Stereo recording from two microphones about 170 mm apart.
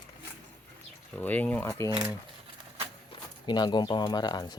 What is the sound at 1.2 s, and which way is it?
Speech, 10° left (ahead or behind).